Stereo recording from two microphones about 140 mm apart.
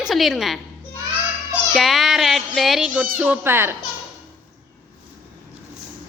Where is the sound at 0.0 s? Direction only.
Centre (ahead or behind).